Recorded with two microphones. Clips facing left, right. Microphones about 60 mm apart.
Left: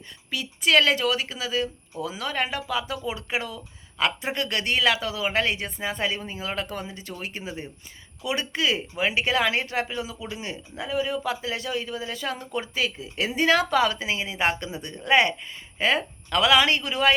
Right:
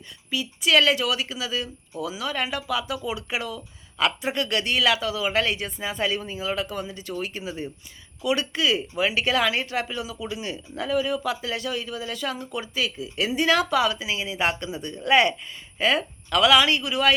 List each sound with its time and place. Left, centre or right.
0.3 s speech: left